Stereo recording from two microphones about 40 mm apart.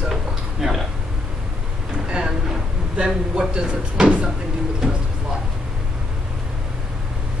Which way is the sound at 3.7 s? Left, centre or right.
Right.